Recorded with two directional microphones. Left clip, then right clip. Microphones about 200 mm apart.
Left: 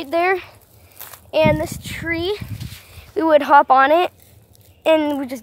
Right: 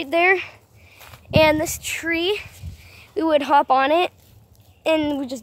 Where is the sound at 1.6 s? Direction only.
10° right (ahead or behind).